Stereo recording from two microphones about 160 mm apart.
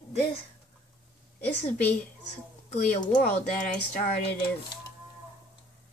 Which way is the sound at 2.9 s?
50° left (ahead or behind).